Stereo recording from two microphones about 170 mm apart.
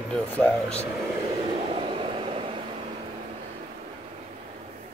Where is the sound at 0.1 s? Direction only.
5° left (ahead or behind).